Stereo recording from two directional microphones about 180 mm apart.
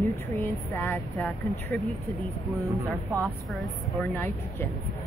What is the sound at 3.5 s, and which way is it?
Speech, centre (ahead or behind).